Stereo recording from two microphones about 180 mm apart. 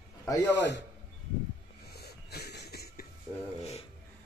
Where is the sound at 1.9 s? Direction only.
65° left (ahead or behind).